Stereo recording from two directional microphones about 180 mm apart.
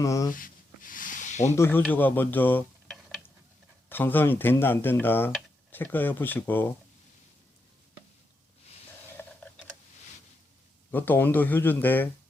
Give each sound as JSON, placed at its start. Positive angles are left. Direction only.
{"t": 0.0, "sound": "speech", "side_deg": 20}
{"t": 0.3, "sound": "a sound", "side_deg": 50}
{"t": 1.5, "sound": "speech", "side_deg": 15}
{"t": 1.9, "sound": "tick-tock", "side_deg": 10}
{"t": 3.8, "sound": "speech", "side_deg": 10}
{"t": 9.2, "sound": "camera", "side_deg": 15}
{"t": 10.9, "sound": "speech", "side_deg": 10}